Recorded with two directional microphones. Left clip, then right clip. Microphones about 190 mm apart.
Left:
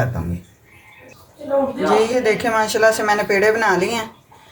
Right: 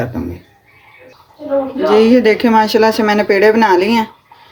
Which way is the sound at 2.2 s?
50° right (ahead or behind).